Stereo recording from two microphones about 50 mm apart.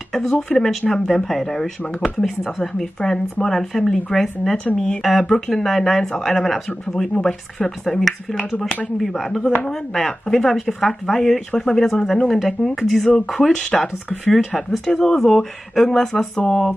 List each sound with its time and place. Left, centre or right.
0.5 s speech: centre
2.1 s speech: centre
2.6 s speech: centre
7.2 s speech: centre
7.8 s speech: centre
14.2 s speech: centre
14.9 s speech: centre